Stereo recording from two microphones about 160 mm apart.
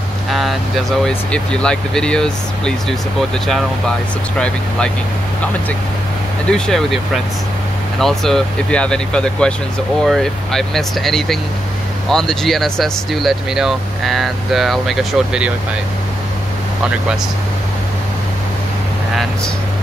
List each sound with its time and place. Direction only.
0.3 s speech: centre (ahead or behind)
6.5 s speech: 5° left (ahead or behind)
8.0 s speech: centre (ahead or behind)